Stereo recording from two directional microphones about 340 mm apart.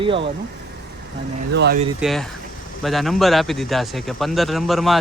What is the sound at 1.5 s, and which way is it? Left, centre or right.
Speech, right.